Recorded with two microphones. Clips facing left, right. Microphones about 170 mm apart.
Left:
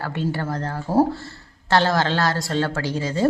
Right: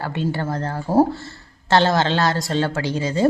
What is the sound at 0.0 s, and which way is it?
A woman's voice, 20° right (ahead or behind).